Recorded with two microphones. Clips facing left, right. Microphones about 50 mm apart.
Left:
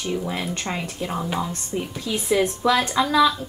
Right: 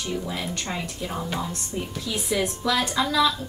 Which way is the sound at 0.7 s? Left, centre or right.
Centre.